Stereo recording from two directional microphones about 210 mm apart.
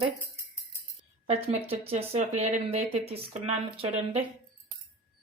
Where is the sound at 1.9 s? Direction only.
30° right (ahead or behind).